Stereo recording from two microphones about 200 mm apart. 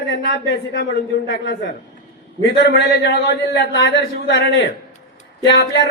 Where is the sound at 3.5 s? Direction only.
60° left (ahead or behind).